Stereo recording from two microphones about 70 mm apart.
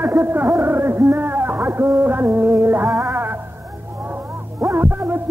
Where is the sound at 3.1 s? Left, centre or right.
Right.